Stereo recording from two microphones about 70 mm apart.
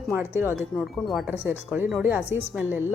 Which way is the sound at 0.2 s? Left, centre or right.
Right.